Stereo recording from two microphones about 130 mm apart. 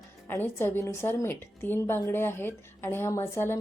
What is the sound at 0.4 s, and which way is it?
A woman's voice, 15° left (ahead or behind).